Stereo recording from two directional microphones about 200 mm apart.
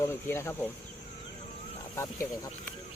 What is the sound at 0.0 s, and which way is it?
Speech, 15° left (ahead or behind).